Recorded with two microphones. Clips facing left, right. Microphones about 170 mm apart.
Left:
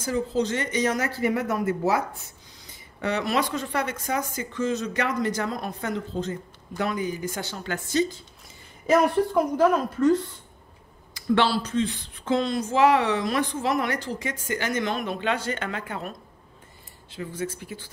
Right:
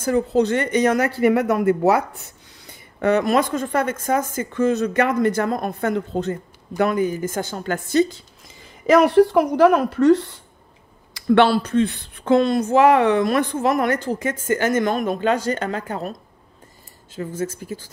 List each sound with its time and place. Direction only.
0.0 s speech: 60° right (ahead or behind)
2.6 s speech: 50° right (ahead or behind)
8.8 s a woman's voice: 90° right
11.1 s speech: 55° right (ahead or behind); by 17.9 s 40° right (ahead or behind)